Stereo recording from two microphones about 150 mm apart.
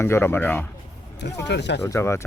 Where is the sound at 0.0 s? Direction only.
15° left (ahead or behind).